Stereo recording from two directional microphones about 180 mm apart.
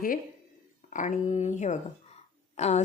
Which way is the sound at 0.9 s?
45° left (ahead or behind).